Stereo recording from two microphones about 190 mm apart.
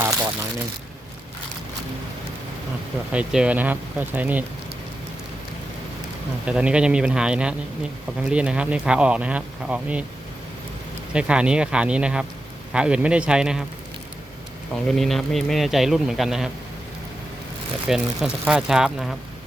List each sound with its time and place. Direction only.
0.0 s a sound: 15° right (ahead or behind)
3.1 s speech: 5° right (ahead or behind)
6.4 s speech: 5° right (ahead or behind)
11.1 s speech: 5° right (ahead or behind)
14.8 s speech: centre (ahead or behind)
17.8 s speech: centre (ahead or behind)